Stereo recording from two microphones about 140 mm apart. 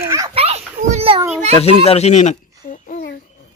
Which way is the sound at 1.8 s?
50° left (ahead or behind).